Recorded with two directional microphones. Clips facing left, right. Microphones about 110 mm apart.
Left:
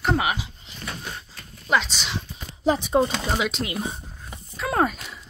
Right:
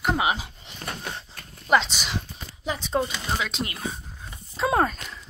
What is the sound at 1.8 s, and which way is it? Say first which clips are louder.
Speech: even; 15° right (ahead or behind).